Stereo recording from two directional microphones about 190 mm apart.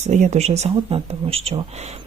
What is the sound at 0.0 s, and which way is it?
Speech, 40° right (ahead or behind).